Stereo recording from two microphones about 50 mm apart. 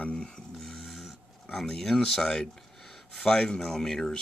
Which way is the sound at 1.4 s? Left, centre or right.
Centre.